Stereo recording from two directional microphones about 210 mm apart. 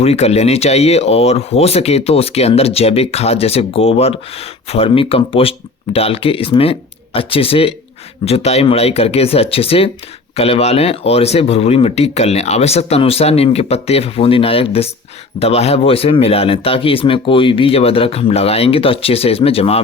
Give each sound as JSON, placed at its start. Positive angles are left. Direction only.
{"t": 0.0, "sound": "speech", "side_deg": 30}